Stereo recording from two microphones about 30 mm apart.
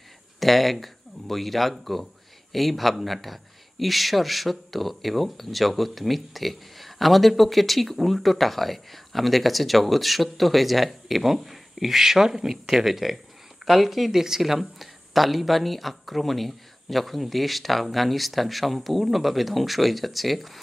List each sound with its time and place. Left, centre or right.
0.4 s speech: centre